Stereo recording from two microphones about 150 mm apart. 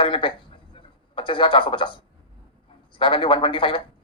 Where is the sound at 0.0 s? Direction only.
35° left (ahead or behind).